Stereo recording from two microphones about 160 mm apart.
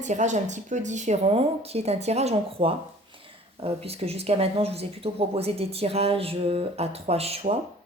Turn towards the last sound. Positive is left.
turn(degrees=-40)  # may be behind; listen again after turning